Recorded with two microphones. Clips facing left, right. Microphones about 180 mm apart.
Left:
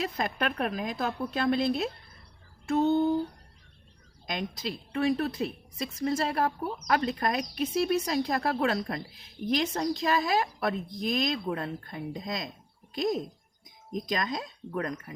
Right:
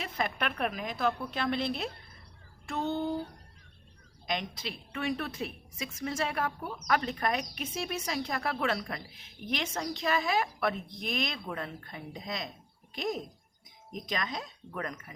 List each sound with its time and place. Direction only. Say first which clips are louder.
0.0 s speech: left 3 dB; 40° left (ahead or behind)
2.6 s a sound: left 8 dB; 45° left (ahead or behind)
4.4 s speech: left 5 dB; 40° left (ahead or behind)